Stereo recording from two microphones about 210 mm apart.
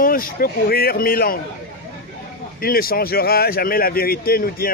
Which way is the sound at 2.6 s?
45° left (ahead or behind).